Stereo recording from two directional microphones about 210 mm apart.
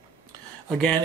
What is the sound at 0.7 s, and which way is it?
Speech, 5° left (ahead or behind).